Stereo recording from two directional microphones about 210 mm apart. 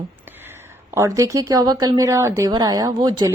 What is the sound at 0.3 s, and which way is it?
A woman's voice, 10° right (ahead or behind).